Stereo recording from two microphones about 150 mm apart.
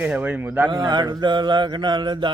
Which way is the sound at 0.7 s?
30° right (ahead or behind).